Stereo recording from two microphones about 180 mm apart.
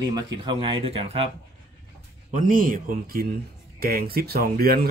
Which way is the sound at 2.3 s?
45° right (ahead or behind).